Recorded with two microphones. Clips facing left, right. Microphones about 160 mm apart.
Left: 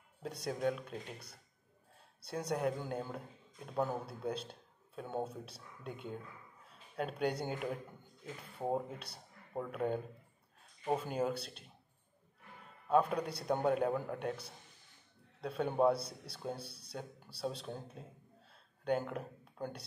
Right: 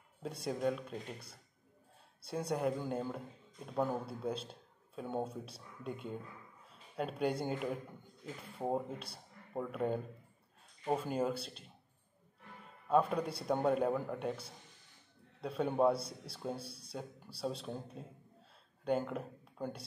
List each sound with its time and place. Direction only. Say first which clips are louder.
0.2 s a man's voice: even; 5° right (ahead or behind)
12.8 s a man's voice: even; centre (ahead or behind)
15.7 s a man's voice: even; 5° left (ahead or behind)
16.6 s speech: right 3 dB; 30° left (ahead or behind)
17.4 s a man's voice: right 1 dB; centre (ahead or behind)